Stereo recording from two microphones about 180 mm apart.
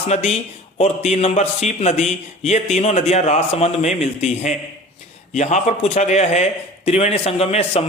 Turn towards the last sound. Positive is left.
turn(degrees=35)  # may be behind; listen again after turning